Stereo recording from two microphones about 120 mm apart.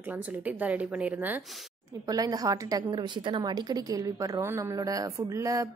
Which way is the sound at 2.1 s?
30° right (ahead or behind).